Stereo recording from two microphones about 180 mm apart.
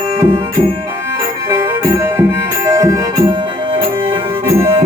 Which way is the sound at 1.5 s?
15° right (ahead or behind).